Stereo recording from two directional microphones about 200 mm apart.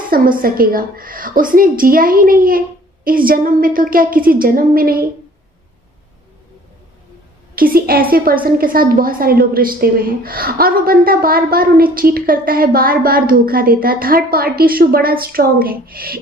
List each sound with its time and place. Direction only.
0.1 s a woman's voice: 45° right (ahead or behind)
7.5 s a woman's voice: 45° right (ahead or behind)